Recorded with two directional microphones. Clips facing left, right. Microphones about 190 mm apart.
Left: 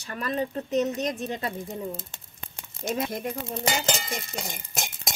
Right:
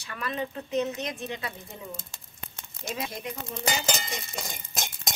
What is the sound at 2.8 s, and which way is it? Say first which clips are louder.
Speech: left 6 dB; 55° left (ahead or behind).